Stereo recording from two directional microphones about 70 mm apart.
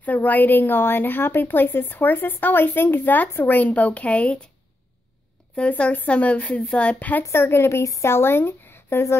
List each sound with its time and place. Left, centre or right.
0.0 s a woman's voice: left
5.6 s a woman's voice: centre
7.3 s speech: left
7.8 s speech: left
8.1 s speech: left